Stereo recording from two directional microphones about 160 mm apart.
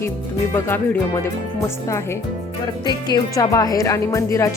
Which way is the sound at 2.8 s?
25° left (ahead or behind).